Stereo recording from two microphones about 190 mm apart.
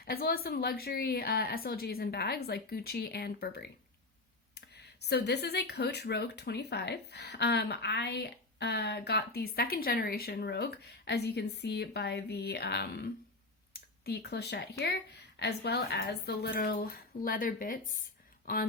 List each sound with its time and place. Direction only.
0.0 s speech: 55° left (ahead or behind)